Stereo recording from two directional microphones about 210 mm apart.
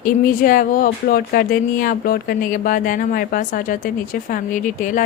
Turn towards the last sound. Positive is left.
turn(degrees=40)  # may be behind; listen again after turning